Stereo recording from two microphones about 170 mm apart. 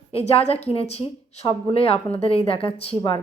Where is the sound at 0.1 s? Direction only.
35° left (ahead or behind).